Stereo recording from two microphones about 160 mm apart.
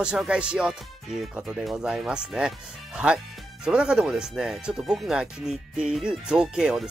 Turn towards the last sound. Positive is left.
turn(degrees=0)  # may be behind; listen again after turning